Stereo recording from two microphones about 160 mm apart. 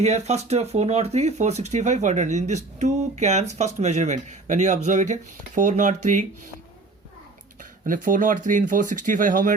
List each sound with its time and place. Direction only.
0.0 s speech: 45° right (ahead or behind)
7.6 s speech: 55° right (ahead or behind)